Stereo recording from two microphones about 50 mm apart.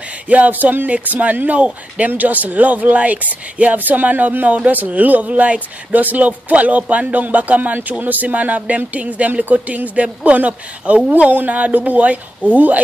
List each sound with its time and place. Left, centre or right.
0.3 s speech: right